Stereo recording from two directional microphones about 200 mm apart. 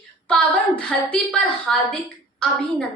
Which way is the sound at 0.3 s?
5° left (ahead or behind).